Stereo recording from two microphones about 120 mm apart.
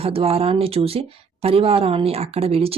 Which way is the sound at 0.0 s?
55° right (ahead or behind).